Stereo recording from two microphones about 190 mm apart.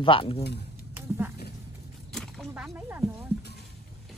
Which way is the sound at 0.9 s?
10° right (ahead or behind).